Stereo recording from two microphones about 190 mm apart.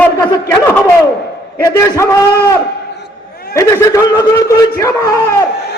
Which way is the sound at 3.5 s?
15° left (ahead or behind).